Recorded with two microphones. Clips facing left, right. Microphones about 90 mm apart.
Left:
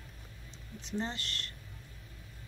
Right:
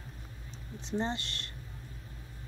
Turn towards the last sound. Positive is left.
turn(degrees=-25)  # may be behind; listen again after turning